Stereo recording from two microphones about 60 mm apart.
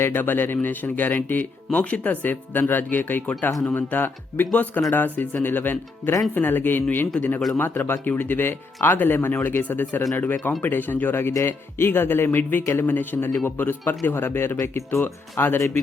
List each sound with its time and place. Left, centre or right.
0.0 s speech: left
7.2 s speech: left
7.5 s speech: left
14.6 s speech: left
15.0 s speech: left